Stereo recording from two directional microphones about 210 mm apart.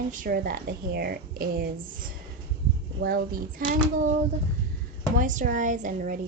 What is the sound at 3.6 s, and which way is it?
Speech, 45° right (ahead or behind).